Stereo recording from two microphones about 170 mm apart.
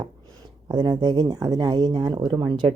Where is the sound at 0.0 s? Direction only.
25° right (ahead or behind).